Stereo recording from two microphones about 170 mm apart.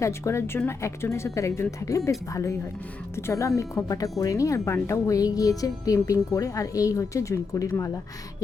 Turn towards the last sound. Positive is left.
turn(degrees=20)  # may be behind; listen again after turning